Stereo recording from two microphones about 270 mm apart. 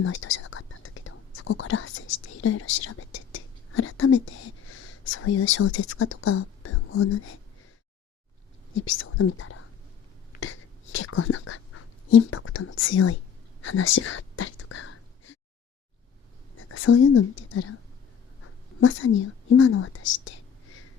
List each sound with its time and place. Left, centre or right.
0.0 s whispering: left
5.7 s speech: left
8.7 s speech: left
10.4 s whispering: left
16.6 s speech: left